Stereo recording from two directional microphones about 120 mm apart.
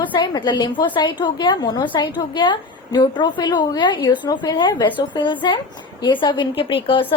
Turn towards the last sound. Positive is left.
turn(degrees=50)  # may be behind; listen again after turning